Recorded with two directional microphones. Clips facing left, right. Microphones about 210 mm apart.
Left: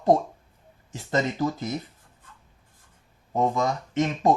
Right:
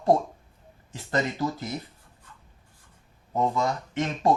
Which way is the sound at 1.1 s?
20° left (ahead or behind).